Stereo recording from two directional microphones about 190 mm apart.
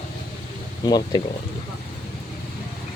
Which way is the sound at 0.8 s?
20° left (ahead or behind).